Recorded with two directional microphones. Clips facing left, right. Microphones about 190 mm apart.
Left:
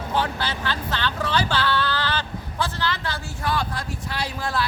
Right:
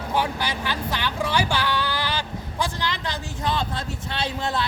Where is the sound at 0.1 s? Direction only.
15° right (ahead or behind).